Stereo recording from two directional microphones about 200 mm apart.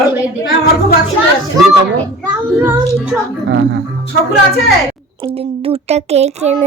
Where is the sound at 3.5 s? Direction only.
60° right (ahead or behind).